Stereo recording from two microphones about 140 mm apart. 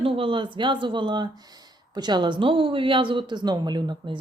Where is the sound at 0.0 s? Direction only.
40° right (ahead or behind).